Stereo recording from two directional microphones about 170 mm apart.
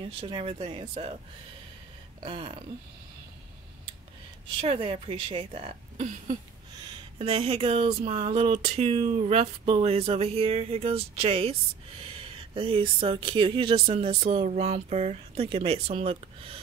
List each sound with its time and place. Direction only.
0.2 s speech: 30° right (ahead or behind)
2.1 s speech: 35° right (ahead or behind)
4.6 s speech: 35° right (ahead or behind)
12.5 s speech: 30° right (ahead or behind)